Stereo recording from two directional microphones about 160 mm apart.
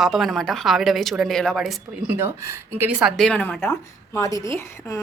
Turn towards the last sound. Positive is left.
turn(degrees=15)  # may be behind; listen again after turning